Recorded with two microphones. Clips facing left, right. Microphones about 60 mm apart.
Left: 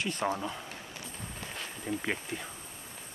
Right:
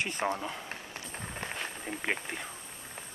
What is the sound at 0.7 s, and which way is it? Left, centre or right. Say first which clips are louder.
Run: right 2 dB; right.